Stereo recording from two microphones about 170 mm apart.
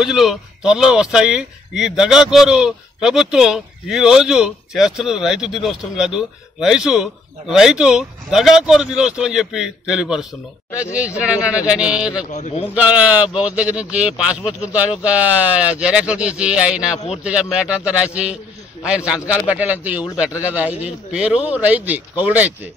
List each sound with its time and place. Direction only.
0.0 s a man's voice: centre (ahead or behind)
12.3 s a man's voice: 40° left (ahead or behind)
12.7 s a man's voice: 5° right (ahead or behind)